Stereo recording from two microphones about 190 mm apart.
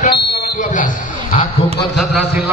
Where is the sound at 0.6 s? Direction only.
40° left (ahead or behind).